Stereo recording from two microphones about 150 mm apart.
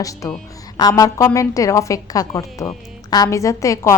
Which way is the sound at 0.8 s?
25° left (ahead or behind).